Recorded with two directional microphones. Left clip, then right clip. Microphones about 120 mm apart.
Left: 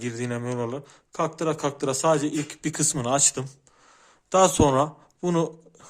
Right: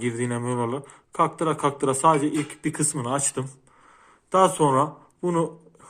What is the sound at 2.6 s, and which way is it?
Speech, 90° left.